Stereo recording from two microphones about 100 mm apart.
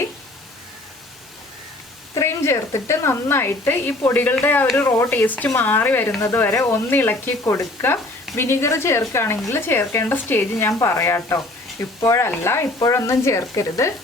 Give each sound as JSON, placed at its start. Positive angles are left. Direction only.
{"t": 2.1, "sound": "speech", "side_deg": 25}